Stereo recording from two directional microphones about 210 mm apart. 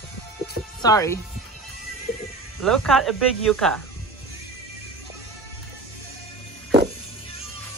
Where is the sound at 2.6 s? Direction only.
Centre (ahead or behind).